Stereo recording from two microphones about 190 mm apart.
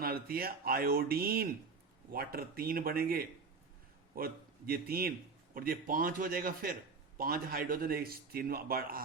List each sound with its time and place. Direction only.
0.0 s a man's voice: 50° right (ahead or behind)